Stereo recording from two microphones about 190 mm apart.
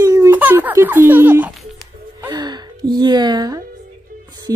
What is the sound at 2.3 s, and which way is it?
Gasp, 20° right (ahead or behind).